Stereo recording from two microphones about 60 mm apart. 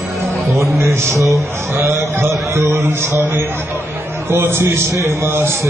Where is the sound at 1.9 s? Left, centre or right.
Right.